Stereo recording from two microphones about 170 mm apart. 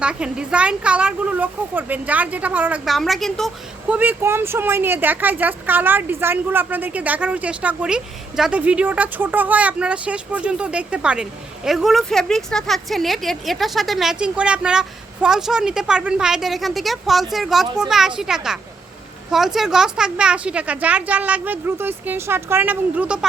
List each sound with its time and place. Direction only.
0.0 s speech: 5° right (ahead or behind)